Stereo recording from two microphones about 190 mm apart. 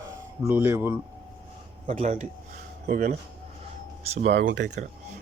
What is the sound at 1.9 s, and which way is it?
Speech, 35° right (ahead or behind).